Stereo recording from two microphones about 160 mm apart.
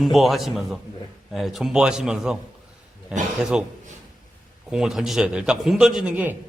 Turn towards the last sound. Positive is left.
turn(degrees=-10)  # may be behind; listen again after turning